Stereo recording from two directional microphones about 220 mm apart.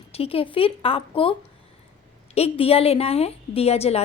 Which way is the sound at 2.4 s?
25° left (ahead or behind).